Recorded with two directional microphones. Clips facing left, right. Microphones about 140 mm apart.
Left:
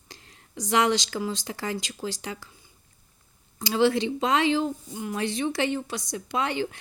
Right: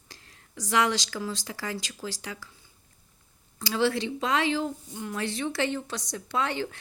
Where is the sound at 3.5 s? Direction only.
20° left (ahead or behind).